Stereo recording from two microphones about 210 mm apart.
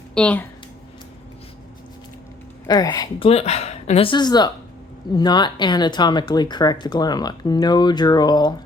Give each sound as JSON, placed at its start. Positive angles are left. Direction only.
{"t": 0.1, "sound": "speech", "side_deg": 5}
{"t": 2.6, "sound": "speech", "side_deg": 20}